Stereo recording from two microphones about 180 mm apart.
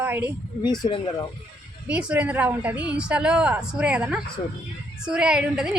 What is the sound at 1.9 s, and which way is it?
A woman's voice, 5° right (ahead or behind).